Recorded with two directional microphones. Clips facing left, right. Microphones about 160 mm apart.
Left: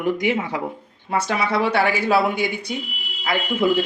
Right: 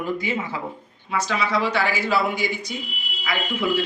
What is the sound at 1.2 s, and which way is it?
Speech, 60° left (ahead or behind).